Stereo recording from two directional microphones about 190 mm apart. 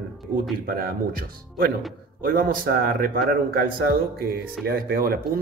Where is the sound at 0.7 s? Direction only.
50° right (ahead or behind).